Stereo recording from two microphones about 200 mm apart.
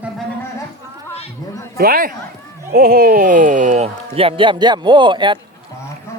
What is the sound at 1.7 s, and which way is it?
Speech, 45° right (ahead or behind).